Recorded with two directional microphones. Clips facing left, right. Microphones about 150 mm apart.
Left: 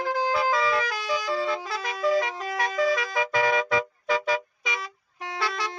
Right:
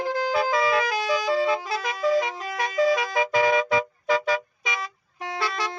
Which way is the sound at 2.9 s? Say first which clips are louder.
Right 3 dB; 15° right (ahead or behind).